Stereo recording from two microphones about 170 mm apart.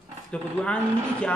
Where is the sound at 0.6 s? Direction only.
5° left (ahead or behind).